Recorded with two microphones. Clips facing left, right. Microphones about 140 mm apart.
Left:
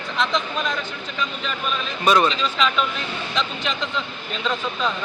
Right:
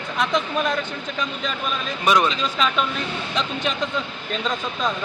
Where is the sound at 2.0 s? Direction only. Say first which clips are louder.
Left 1 dB; 10° right (ahead or behind).